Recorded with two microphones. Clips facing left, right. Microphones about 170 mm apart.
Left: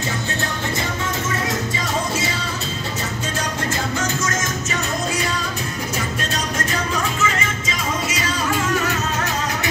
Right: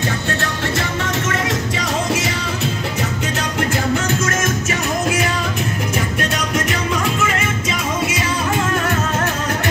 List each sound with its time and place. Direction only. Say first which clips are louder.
4.4 s music: right 4 dB; 65° right (ahead or behind)
7.3 s music: right 4 dB; 65° right (ahead or behind)